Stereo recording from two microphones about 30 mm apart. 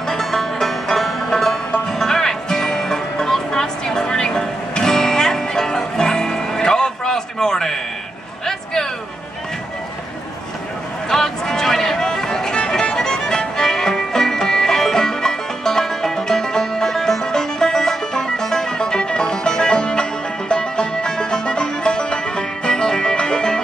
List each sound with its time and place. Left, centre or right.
0.1 s music: centre
11.1 s a sound: centre
12.9 s music: centre